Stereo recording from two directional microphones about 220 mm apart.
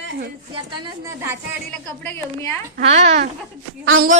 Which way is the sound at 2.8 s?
30° right (ahead or behind).